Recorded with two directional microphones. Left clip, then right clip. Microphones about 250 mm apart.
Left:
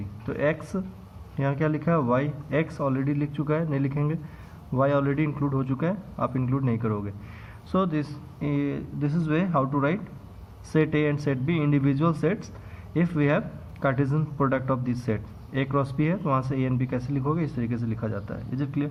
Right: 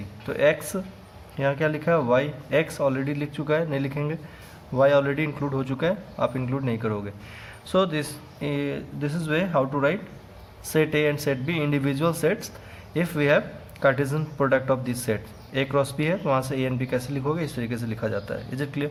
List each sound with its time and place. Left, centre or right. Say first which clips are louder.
0.3 s speech: right 5 dB; right